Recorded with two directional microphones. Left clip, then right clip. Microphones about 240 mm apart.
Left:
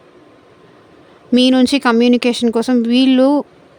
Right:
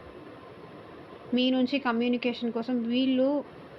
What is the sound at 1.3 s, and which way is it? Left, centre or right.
Speech, left.